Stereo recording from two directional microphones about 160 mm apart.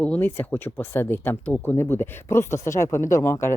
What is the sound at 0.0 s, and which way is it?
Speech, 10° left (ahead or behind).